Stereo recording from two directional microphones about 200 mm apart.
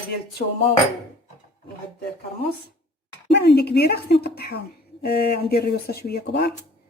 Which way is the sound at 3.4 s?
55° left (ahead or behind).